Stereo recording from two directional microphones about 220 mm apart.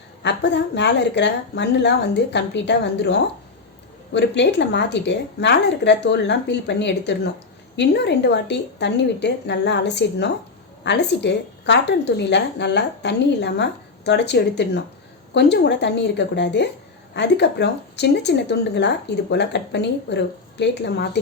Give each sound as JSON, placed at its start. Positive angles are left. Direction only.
{"t": 0.2, "sound": "speech", "side_deg": 50}